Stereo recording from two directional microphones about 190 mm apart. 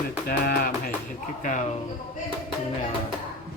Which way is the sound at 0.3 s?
55° left (ahead or behind).